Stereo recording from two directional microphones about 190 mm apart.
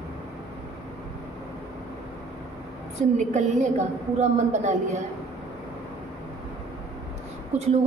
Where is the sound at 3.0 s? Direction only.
40° right (ahead or behind).